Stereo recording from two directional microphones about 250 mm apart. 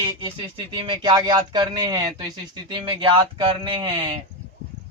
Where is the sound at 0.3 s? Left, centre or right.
Centre.